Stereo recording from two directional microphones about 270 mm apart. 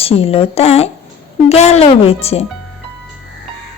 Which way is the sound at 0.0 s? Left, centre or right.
Left.